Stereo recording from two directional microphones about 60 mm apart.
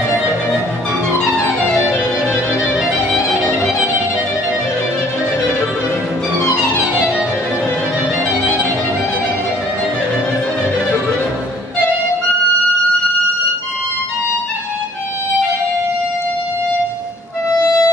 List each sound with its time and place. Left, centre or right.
17.6 s music: left